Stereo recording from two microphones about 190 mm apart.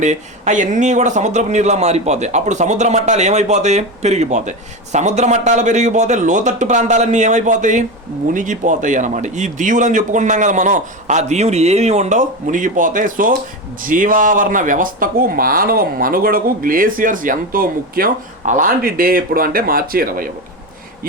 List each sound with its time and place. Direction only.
0.0 s speech: 40° right (ahead or behind)